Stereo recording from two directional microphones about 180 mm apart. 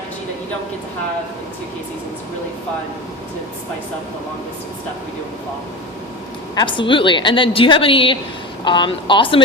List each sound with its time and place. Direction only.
6.6 s a woman's voice: 25° left (ahead or behind)